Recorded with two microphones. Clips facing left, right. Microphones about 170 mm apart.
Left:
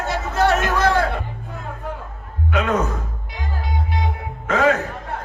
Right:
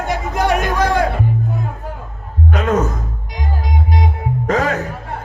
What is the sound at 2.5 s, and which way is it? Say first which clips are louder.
Music: right 2 dB; 40° right (ahead or behind).